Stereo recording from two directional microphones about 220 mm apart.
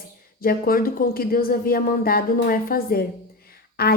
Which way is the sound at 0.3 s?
40° left (ahead or behind).